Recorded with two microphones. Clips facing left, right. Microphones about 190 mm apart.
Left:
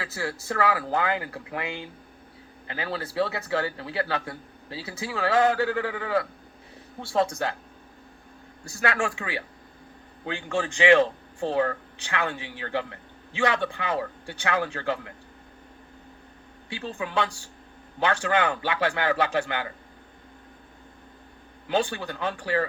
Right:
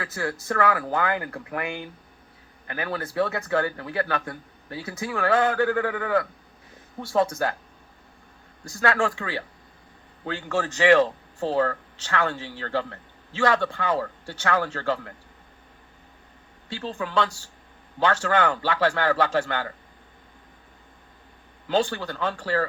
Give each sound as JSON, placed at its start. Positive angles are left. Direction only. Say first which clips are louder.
{"t": 0.0, "sound": "a man's voice", "louder": "right 2 dB", "side_deg": 25}
{"t": 8.7, "sound": "a man's voice", "louder": "right 3 dB", "side_deg": 15}
{"t": 16.9, "sound": "a man's voice", "louder": "right 2 dB", "side_deg": 15}
{"t": 21.7, "sound": "a man's voice", "louder": "right 2 dB", "side_deg": 15}